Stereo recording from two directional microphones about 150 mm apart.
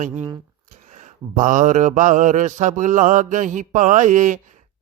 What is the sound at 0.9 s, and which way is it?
Mantra, 55° right (ahead or behind).